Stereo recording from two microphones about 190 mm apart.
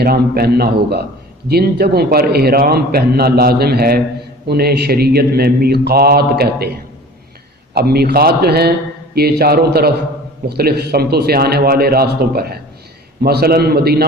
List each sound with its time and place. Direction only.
0.0 s a man's voice: 55° right (ahead or behind)
7.7 s a man's voice: 55° right (ahead or behind)